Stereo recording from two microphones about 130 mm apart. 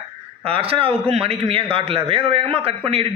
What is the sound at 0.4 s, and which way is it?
A man's voice, 45° right (ahead or behind).